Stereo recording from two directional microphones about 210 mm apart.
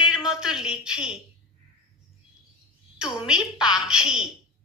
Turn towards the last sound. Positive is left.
turn(degrees=-5)  # may be behind; listen again after turning